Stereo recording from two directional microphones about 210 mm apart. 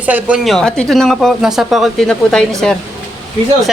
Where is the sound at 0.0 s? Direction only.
5° right (ahead or behind).